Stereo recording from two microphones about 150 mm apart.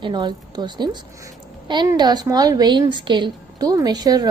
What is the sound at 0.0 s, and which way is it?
A woman's voice, 30° right (ahead or behind).